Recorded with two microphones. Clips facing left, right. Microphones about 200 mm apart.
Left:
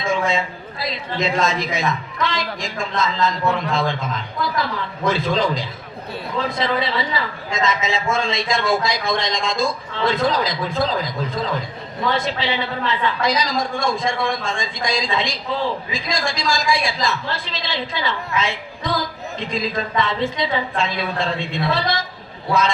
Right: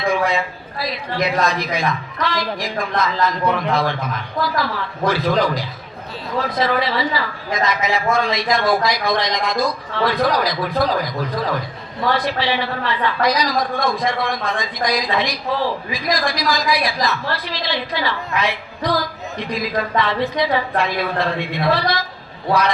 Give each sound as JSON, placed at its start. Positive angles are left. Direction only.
{"t": 0.0, "sound": "a man's voice", "side_deg": 25}
{"t": 13.6, "sound": "a man's voice", "side_deg": 50}
{"t": 14.3, "sound": "a woman's voice", "side_deg": 25}